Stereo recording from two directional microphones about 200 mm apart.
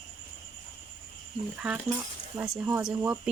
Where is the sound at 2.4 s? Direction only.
5° right (ahead or behind).